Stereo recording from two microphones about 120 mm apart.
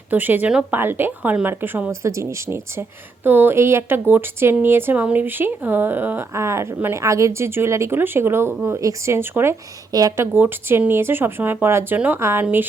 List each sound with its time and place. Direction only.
0.1 s a woman's voice: 15° right (ahead or behind)
10.3 s a woman's voice: 15° right (ahead or behind)